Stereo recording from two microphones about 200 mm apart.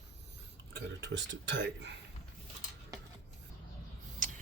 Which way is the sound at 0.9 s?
65° right (ahead or behind).